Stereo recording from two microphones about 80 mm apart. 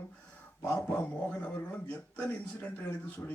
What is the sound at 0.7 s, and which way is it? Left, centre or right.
Speech, centre.